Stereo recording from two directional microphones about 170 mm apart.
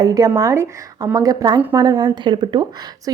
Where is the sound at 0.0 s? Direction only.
20° right (ahead or behind).